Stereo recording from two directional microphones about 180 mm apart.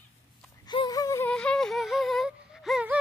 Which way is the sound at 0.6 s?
25° left (ahead or behind).